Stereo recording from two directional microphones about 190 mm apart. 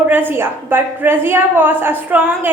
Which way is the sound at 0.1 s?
10° right (ahead or behind).